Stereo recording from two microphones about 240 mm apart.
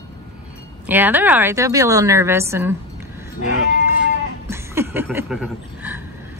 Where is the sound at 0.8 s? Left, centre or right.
Centre.